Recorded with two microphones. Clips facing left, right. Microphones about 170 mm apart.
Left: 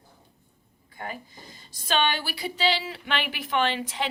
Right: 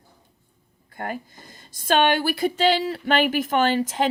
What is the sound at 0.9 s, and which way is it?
A woman's voice, 50° right (ahead or behind).